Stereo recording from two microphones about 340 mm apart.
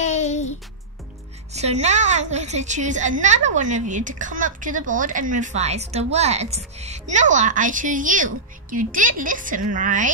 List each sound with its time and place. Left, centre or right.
0.0 s music: left
1.5 s a woman's voice: centre